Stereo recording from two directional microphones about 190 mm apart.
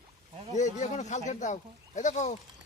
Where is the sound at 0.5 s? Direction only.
40° left (ahead or behind).